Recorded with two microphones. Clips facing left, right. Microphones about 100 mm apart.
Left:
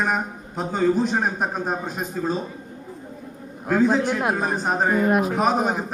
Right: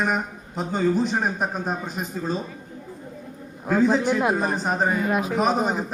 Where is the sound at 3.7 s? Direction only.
5° left (ahead or behind).